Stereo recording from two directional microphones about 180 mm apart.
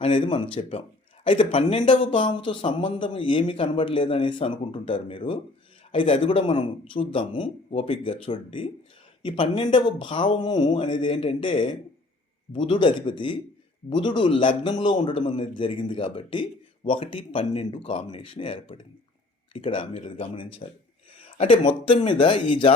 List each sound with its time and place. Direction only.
0.0 s a man's voice: 30° left (ahead or behind)
21.2 s a sound: 30° left (ahead or behind)
21.7 s a man's voice: 35° left (ahead or behind)